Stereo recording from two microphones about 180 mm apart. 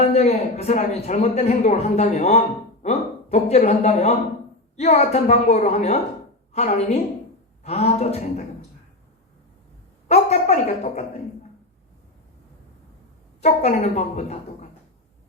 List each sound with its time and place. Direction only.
0.0 s a man's voice: 40° left (ahead or behind)
10.1 s a man's voice: 40° left (ahead or behind)
13.4 s a man's voice: 40° left (ahead or behind)